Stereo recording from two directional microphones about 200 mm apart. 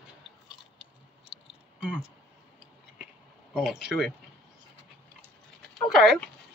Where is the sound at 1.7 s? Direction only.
5° right (ahead or behind).